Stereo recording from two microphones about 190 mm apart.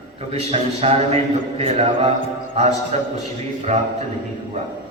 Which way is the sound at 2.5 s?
35° right (ahead or behind).